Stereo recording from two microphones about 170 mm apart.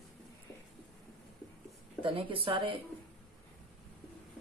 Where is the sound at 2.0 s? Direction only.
30° right (ahead or behind).